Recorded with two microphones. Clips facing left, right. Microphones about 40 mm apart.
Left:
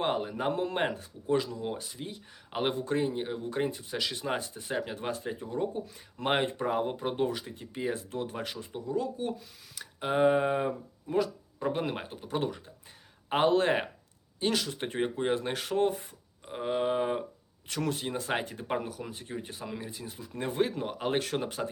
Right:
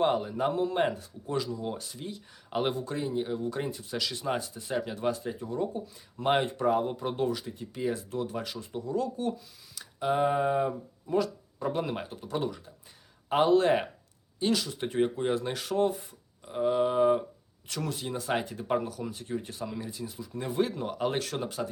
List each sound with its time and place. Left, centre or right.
0.0 s speech: left
1.6 s speech: left
2.8 s speech: left
6.7 s speech: left
6.9 s speech: left
8.7 s speech: centre
9.7 s speech: left
12.4 s speech: left
14.9 s speech: left
17.7 s speech: left
19.9 s speech: left
20.7 s speech: left